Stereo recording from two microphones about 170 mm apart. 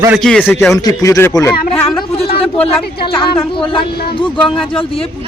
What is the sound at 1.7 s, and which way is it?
Speech, 35° left (ahead or behind).